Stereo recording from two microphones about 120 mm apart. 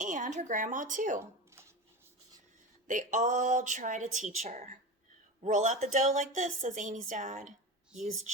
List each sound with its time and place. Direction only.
0.0 s a woman's voice: 85° right
2.8 s a woman's voice: 90° right